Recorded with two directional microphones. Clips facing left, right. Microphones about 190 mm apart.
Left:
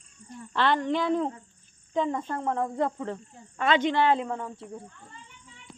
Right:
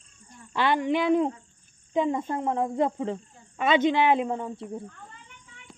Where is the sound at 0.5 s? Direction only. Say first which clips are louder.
Right 1 dB; 10° right (ahead or behind).